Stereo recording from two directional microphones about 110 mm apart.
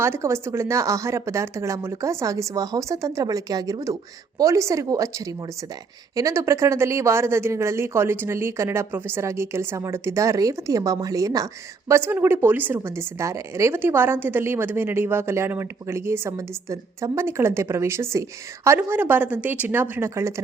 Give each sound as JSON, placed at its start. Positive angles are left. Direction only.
{"t": 0.0, "sound": "a woman's voice", "side_deg": -25}
{"t": 6.1, "sound": "a woman's voice", "side_deg": -25}